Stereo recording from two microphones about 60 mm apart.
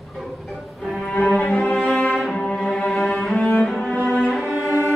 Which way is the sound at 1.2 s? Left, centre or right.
Left.